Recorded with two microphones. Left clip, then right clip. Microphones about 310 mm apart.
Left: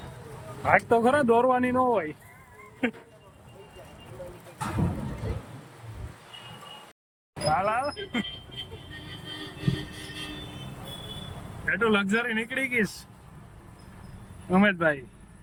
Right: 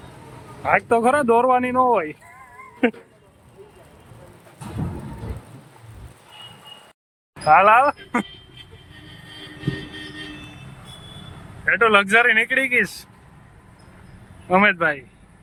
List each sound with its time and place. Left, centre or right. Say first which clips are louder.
0.6 s speech: right 4 dB; centre
7.5 s speech: right 14 dB; right
11.6 s speech: right 9 dB; centre
14.5 s speech: right 7 dB; centre